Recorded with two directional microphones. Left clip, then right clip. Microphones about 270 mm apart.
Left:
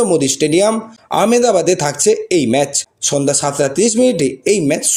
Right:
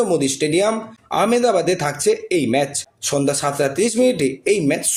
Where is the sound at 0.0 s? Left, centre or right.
Left.